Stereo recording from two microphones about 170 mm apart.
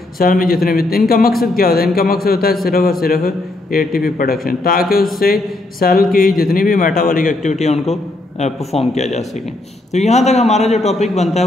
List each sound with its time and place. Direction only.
0.2 s a man's voice: 55° left (ahead or behind); by 11.4 s 40° left (ahead or behind)